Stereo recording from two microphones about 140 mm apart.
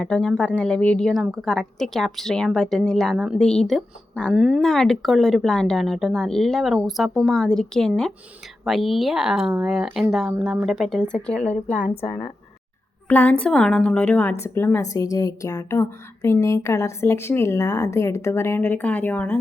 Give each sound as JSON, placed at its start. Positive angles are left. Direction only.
{"t": 0.0, "sound": "a woman's voice", "side_deg": 5}
{"t": 4.4, "sound": "a woman's voice", "side_deg": -5}
{"t": 13.1, "sound": "a woman's voice", "side_deg": 10}